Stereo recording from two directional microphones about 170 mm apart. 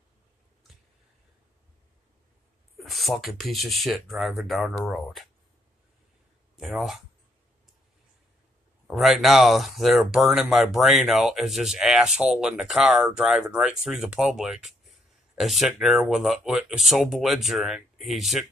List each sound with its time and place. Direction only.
2.8 s speech: centre (ahead or behind)
6.5 s speech: centre (ahead or behind)
8.8 s speech: centre (ahead or behind)